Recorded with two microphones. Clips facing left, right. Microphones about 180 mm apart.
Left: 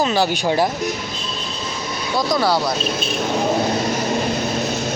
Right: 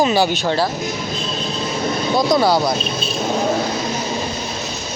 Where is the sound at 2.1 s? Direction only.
20° right (ahead or behind).